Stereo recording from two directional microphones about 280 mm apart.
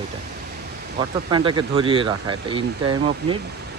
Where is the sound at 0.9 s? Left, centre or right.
Centre.